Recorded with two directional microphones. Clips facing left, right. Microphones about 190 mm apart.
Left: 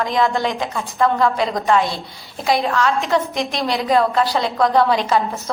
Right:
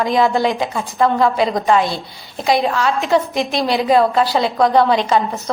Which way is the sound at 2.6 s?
20° right (ahead or behind).